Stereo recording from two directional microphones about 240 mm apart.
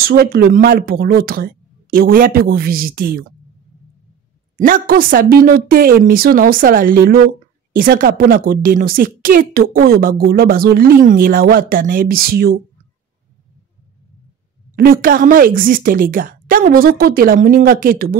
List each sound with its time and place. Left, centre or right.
0.0 s speech: right
4.6 s speech: right
14.8 s speech: right